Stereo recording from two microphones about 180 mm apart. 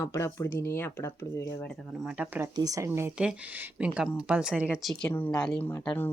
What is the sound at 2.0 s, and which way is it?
Speech, 5° right (ahead or behind).